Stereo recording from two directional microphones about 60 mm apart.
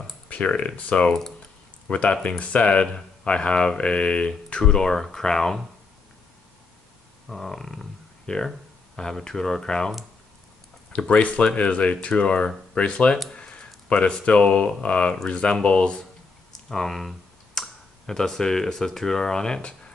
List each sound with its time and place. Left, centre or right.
0.3 s speech: left
7.2 s speech: centre
10.9 s speech: left
13.3 s a sound: centre
13.8 s speech: centre
16.6 s speech: centre